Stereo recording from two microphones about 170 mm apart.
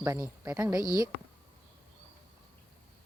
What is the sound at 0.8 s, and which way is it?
Speech, 20° left (ahead or behind).